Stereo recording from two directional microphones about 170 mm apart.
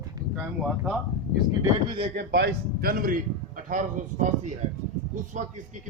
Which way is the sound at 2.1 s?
70° right (ahead or behind).